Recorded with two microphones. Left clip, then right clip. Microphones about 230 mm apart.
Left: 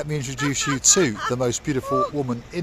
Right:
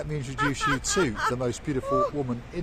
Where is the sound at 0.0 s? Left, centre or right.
Left.